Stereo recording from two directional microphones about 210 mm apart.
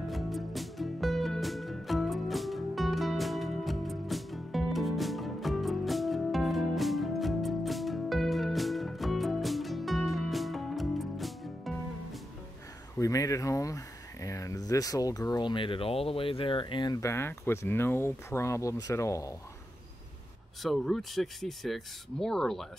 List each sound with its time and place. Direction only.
0.1 s music: centre (ahead or behind)
12.9 s speech: 15° left (ahead or behind)
20.6 s speech: centre (ahead or behind)